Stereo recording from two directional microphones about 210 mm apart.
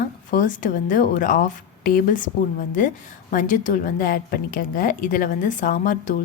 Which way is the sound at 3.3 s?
40° left (ahead or behind).